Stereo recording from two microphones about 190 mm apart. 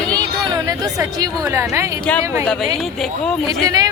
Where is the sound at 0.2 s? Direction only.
20° right (ahead or behind).